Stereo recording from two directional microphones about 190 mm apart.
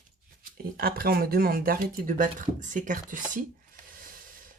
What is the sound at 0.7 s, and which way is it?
Speech, 50° right (ahead or behind).